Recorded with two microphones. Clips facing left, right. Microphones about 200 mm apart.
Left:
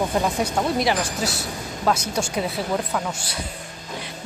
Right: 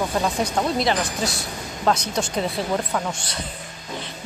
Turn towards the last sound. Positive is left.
turn(degrees=5)  # may be behind; listen again after turning